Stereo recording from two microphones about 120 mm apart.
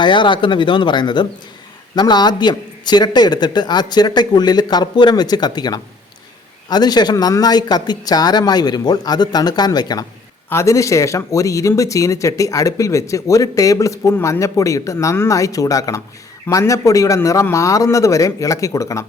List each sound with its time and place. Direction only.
0.0 s a man's voice: 40° left (ahead or behind)